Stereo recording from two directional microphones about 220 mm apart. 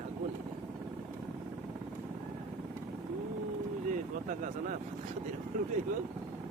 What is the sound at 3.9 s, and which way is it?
Speech, 35° right (ahead or behind).